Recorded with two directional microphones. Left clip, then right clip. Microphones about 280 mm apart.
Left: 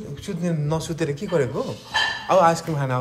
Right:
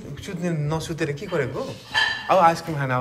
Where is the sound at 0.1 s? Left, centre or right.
Centre.